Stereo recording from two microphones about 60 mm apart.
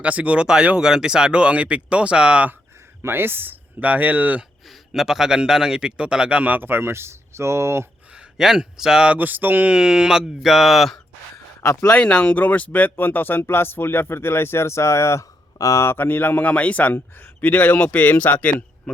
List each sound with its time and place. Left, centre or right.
0.0 s speech: right
3.0 s speech: right
4.9 s speech: centre; by 7.9 s right
8.1 s a man's voice: centre
9.1 s speech: right
9.6 s speech: centre
11.9 s speech: centre; by 15.3 s left
15.5 s speech: left
15.8 s speech: left